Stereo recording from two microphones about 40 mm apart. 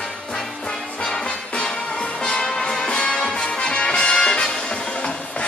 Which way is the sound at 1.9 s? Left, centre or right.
Left.